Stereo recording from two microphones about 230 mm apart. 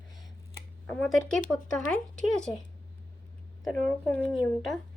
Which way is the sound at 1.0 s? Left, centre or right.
Centre.